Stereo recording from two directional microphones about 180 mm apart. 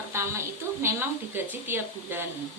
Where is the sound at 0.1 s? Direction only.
15° right (ahead or behind).